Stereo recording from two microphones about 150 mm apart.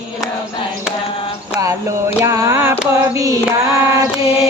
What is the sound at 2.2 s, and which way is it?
Mantra, 20° right (ahead or behind).